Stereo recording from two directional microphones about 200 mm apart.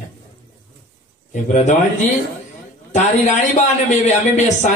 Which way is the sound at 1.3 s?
35° left (ahead or behind).